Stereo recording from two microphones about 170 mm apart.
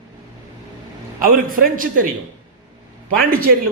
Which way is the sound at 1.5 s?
55° right (ahead or behind).